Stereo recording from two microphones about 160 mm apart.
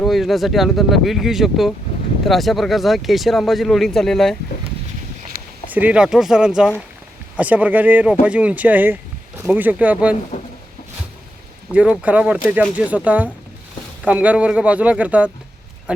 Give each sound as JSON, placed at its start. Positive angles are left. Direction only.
{"t": 0.0, "sound": "speech", "side_deg": 0}
{"t": 5.3, "sound": "a sound", "side_deg": -60}
{"t": 5.7, "sound": "a man's voice", "side_deg": -10}
{"t": 11.7, "sound": "a man's voice", "side_deg": -10}